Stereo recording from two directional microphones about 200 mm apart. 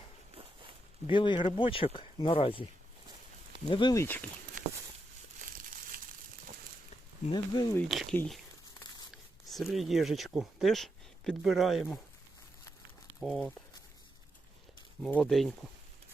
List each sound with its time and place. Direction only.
1.0 s speech: 25° left (ahead or behind)
3.7 s speech: 20° left (ahead or behind)
5.4 s crumpling: 45° right (ahead or behind)
7.3 s speech: 20° left (ahead or behind)
7.9 s speech: 5° left (ahead or behind)
9.5 s speech: centre (ahead or behind)
13.1 s speech: centre (ahead or behind)
15.0 s speech: 5° left (ahead or behind)